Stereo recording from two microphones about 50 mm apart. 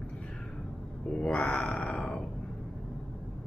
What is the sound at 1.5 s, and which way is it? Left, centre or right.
Speech, left.